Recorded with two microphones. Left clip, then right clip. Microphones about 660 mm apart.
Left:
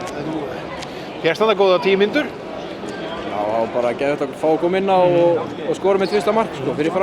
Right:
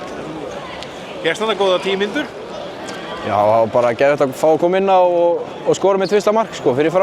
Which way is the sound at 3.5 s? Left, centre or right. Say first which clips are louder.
Right 5 dB; right.